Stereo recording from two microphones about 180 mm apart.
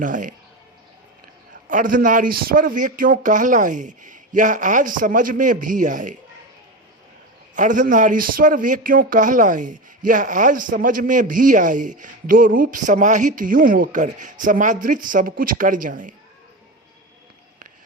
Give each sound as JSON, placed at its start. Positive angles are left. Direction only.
{"t": 0.0, "sound": "a man's voice", "side_deg": -45}
{"t": 1.7, "sound": "a man's voice", "side_deg": -50}
{"t": 7.5, "sound": "a man's voice", "side_deg": -45}